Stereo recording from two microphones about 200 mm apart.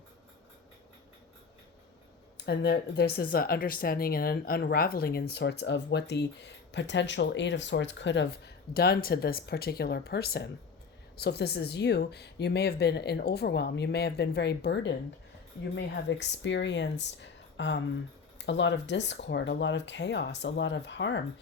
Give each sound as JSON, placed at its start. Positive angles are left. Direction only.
{"t": 2.5, "sound": "speech", "side_deg": 55}